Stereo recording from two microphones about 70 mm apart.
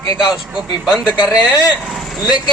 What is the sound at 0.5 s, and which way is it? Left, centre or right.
Speech, centre.